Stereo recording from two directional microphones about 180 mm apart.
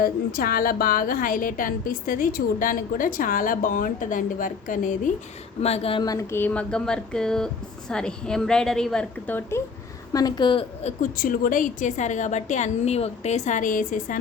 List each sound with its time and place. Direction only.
0.0 s a woman's voice: 55° left (ahead or behind)
5.5 s a woman's voice: 35° left (ahead or behind)
11.0 s a woman's voice: 50° left (ahead or behind)